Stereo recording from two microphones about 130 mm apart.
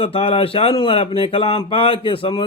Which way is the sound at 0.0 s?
45° left (ahead or behind).